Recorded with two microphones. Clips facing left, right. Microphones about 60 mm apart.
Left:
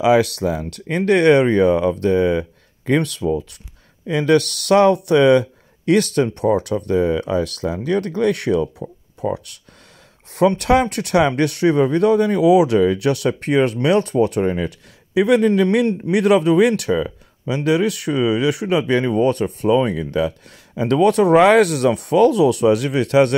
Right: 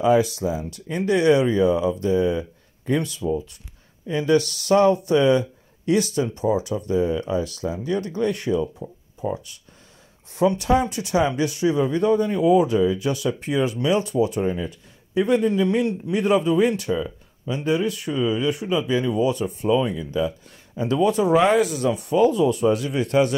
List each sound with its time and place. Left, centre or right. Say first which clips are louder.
0.0 s speech: left 3 dB; left
4.1 s speech: left 4 dB; left
16.1 s speech: left 5 dB; left